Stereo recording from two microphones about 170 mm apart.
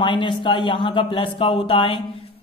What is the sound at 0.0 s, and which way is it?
Speech, 30° left (ahead or behind).